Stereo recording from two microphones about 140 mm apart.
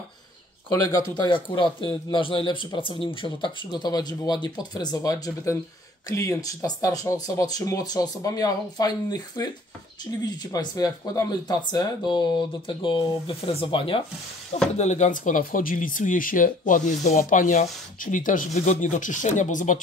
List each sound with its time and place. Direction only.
0.8 s speech: 25° left (ahead or behind)
14.8 s speech: 55° left (ahead or behind)